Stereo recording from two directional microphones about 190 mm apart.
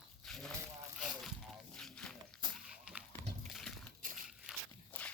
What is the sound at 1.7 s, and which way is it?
Wild animals, 5° left (ahead or behind).